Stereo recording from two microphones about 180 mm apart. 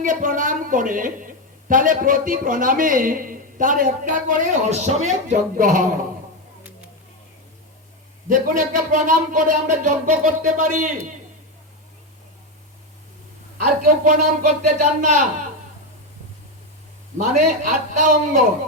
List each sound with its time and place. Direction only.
0.0 s a woman's voice: 45° right (ahead or behind)
6.6 s music: 10° right (ahead or behind)
8.3 s a woman's voice: 45° right (ahead or behind)
13.8 s a woman's voice: 45° right (ahead or behind)
17.2 s a woman's voice: 45° right (ahead or behind)